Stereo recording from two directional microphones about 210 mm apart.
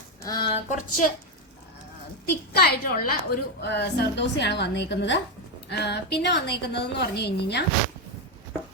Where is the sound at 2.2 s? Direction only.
50° left (ahead or behind).